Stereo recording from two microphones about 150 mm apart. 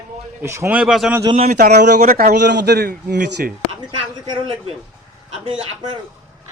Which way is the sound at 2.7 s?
90° right.